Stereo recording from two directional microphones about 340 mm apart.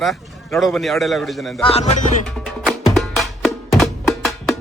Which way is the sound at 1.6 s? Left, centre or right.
Centre.